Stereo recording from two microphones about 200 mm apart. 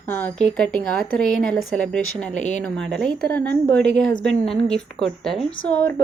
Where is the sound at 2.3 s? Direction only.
35° left (ahead or behind).